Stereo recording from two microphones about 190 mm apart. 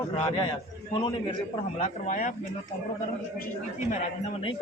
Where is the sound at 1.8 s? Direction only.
40° left (ahead or behind).